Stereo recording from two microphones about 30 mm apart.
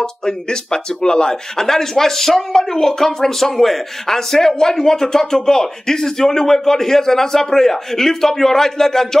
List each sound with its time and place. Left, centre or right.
0.0 s speech: left
1.6 s speech: centre